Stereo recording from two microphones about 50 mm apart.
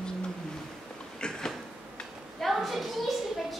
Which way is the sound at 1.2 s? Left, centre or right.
Centre.